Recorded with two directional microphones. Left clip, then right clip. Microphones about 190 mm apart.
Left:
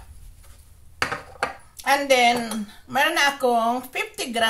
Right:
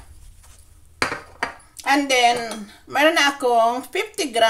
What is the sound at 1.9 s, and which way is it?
A woman's voice, 40° right (ahead or behind).